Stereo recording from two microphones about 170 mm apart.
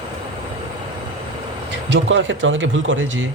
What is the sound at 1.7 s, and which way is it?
Speech, 90° right.